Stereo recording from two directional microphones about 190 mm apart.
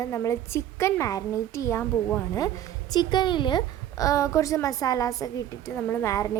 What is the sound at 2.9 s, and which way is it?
A woman's voice, 25° left (ahead or behind).